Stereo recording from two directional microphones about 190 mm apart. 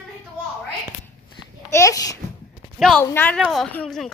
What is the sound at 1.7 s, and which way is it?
Babbling, 15° left (ahead or behind).